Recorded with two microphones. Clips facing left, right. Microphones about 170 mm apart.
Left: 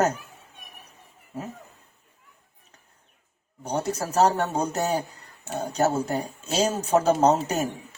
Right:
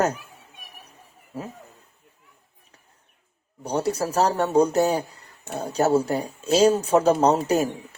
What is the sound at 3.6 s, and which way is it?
Speech, 35° right (ahead or behind).